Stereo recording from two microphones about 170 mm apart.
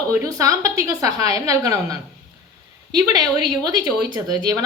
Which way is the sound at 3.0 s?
25° right (ahead or behind).